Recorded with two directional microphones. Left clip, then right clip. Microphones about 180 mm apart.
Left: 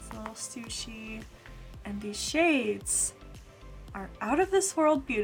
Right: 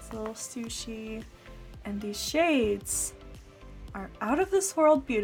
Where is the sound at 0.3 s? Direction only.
35° right (ahead or behind).